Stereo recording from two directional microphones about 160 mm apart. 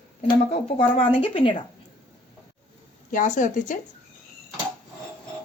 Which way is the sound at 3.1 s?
50° left (ahead or behind).